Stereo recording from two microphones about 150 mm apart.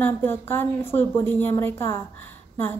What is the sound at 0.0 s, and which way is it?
A woman's voice, 15° left (ahead or behind).